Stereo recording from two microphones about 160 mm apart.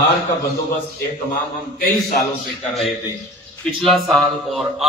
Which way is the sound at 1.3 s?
65° left (ahead or behind).